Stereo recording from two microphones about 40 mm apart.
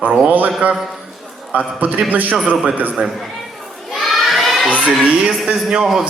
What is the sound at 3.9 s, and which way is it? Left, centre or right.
Children shouting, centre.